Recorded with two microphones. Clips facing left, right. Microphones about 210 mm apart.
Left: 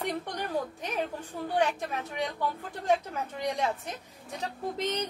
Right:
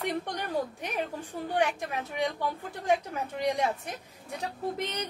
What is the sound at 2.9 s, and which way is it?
A woman's voice, 10° right (ahead or behind).